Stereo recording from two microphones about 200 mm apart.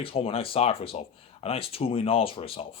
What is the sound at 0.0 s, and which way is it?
A man's voice, 30° left (ahead or behind).